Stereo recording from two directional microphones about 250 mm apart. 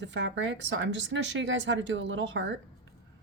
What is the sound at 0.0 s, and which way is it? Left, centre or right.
A woman's voice, right.